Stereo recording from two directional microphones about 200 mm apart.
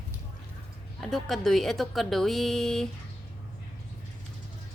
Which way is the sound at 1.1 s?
Centre (ahead or behind).